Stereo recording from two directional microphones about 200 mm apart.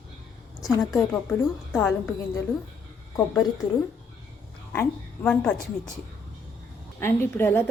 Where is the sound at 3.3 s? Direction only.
20° left (ahead or behind).